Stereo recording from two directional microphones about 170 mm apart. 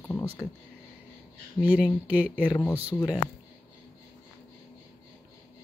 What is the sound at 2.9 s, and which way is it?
Speech, 15° left (ahead or behind).